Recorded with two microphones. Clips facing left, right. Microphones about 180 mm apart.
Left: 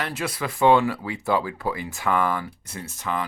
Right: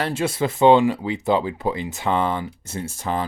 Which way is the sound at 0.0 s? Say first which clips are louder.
Right 6 dB; 25° right (ahead or behind).